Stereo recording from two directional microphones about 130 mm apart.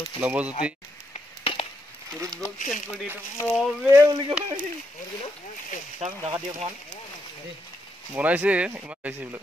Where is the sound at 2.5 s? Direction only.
80° left.